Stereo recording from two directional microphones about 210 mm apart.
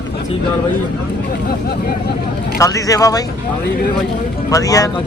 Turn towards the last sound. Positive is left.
turn(degrees=15)  # may be behind; listen again after turning